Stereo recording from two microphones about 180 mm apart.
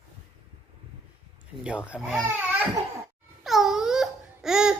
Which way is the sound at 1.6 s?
5° right (ahead or behind).